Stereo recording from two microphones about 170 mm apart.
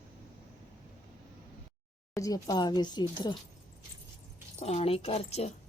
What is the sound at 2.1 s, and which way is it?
Speech, 20° left (ahead or behind).